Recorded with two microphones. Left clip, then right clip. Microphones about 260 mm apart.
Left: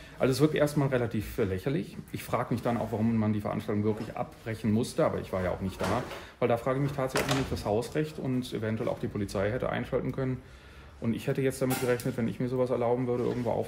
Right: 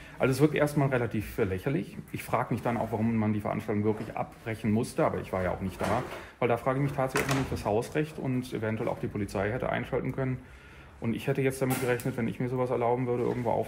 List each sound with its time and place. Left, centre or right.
0.2 s a man's voice: centre